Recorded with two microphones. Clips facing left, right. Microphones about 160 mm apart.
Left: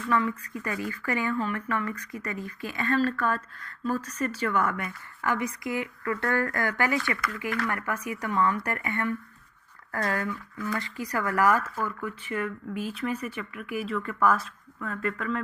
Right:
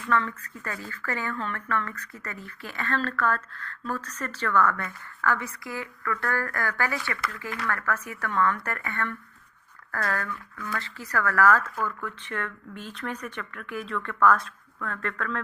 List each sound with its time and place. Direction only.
0.1 s speech: 15° left (ahead or behind)